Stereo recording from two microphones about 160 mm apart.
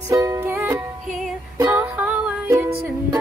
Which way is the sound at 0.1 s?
20° right (ahead or behind).